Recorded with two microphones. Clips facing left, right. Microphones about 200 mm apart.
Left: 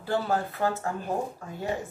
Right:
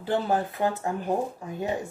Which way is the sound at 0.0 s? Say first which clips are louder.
Right 2 dB; 20° right (ahead or behind).